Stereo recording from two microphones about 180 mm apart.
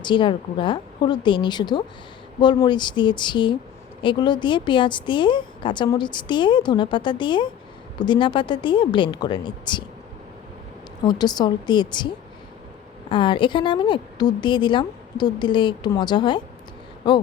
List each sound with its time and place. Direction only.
0.0 s a woman's voice: 25° left (ahead or behind)
11.0 s a woman's voice: 25° left (ahead or behind)
13.1 s a woman's voice: 25° left (ahead or behind)